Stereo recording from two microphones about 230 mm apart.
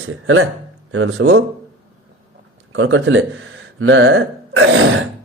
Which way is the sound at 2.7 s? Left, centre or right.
Right.